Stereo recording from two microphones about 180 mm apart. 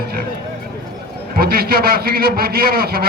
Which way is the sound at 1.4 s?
55° right (ahead or behind).